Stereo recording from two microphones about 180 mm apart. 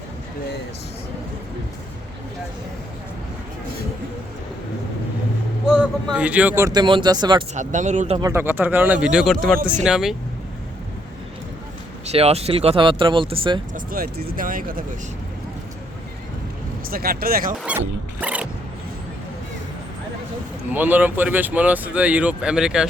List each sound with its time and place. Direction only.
5.6 s vehicle: 5° right (ahead or behind)
6.1 s speech: 5° right (ahead or behind); by 7.4 s 25° right (ahead or behind)
7.5 s speech: 45° right (ahead or behind)
8.2 s speech: 15° right (ahead or behind)
12.0 s speech: 35° right (ahead or behind)
13.7 s speech: 55° right (ahead or behind)
16.9 s speech: 55° right (ahead or behind)
17.7 s speech: 10° right (ahead or behind)
20.7 s speech: 10° right (ahead or behind)